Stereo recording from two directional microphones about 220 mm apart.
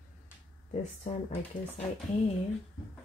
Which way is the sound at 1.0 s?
35° left (ahead or behind).